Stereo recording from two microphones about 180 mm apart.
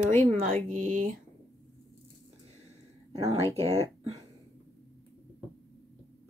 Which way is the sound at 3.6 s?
35° right (ahead or behind).